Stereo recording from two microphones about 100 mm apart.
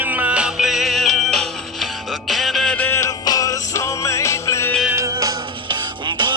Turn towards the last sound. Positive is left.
turn(degrees=-50)  # may be behind; listen again after turning